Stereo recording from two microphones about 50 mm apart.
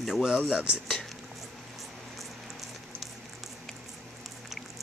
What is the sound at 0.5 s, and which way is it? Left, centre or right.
Speech, right.